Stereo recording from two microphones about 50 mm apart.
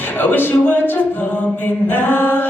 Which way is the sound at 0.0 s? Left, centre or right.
Left.